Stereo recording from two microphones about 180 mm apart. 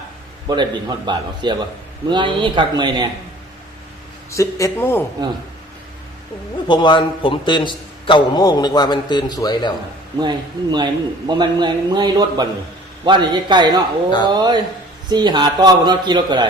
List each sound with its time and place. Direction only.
0.4 s a man's voice: 25° right (ahead or behind)
4.3 s speech: 15° left (ahead or behind)
6.7 s a man's voice: 25° left (ahead or behind)
10.2 s a man's voice: 25° right (ahead or behind)